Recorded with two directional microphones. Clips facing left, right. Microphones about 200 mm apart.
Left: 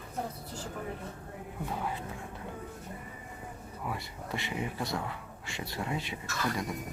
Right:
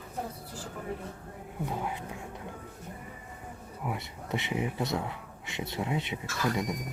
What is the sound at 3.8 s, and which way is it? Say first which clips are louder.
A man's voice: right 2 dB; 20° right (ahead or behind).